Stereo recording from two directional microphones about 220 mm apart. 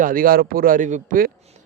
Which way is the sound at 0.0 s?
40° right (ahead or behind).